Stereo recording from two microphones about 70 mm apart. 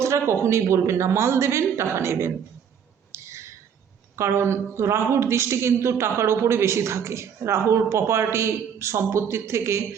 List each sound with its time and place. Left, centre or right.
0.0 s a man's voice: right
3.1 s a sound: right
4.2 s a man's voice: right